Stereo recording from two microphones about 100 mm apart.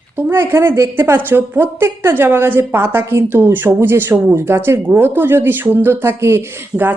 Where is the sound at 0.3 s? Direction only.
25° right (ahead or behind).